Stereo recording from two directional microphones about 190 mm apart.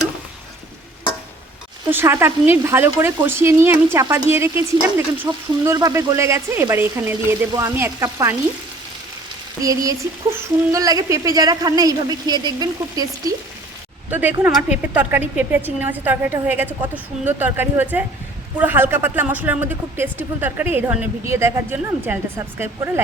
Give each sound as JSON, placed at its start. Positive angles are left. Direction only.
{"t": 1.9, "sound": "speech", "side_deg": -10}
{"t": 9.6, "sound": "speech", "side_deg": -20}
{"t": 14.1, "sound": "speech", "side_deg": -10}